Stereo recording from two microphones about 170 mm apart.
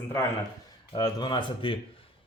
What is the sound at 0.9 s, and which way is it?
Speech, 25° left (ahead or behind).